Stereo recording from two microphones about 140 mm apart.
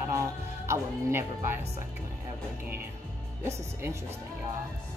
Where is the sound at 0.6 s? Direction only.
15° right (ahead or behind).